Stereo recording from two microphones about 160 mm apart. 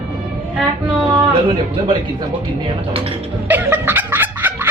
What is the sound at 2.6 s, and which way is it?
Speech, 35° right (ahead or behind).